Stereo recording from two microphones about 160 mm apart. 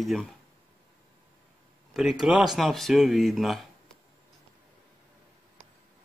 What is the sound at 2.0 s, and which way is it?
Speech, 5° right (ahead or behind).